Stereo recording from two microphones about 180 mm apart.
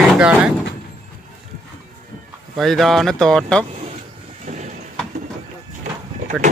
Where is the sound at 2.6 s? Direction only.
Centre (ahead or behind).